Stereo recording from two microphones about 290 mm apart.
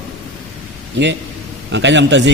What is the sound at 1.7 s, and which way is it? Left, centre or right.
Speech, right.